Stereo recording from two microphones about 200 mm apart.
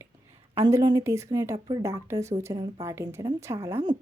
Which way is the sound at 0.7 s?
15° right (ahead or behind).